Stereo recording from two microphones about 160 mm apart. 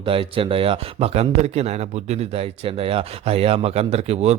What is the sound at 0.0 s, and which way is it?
Speech, 35° right (ahead or behind).